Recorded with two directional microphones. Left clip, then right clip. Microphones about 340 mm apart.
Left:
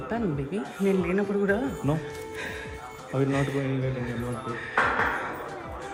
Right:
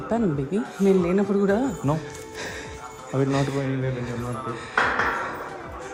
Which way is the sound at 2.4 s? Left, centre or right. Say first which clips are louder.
Right 3 dB; centre.